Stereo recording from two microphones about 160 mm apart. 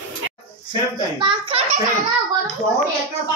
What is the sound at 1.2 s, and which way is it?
Speech, 35° right (ahead or behind).